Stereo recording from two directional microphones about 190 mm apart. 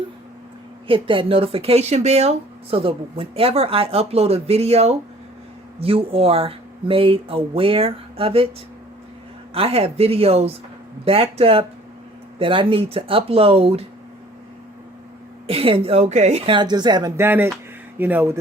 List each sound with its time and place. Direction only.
0.9 s speech: 25° right (ahead or behind)
9.6 s speech: 30° right (ahead or behind)
15.4 s speech: 30° right (ahead or behind); by 18.3 s 10° right (ahead or behind)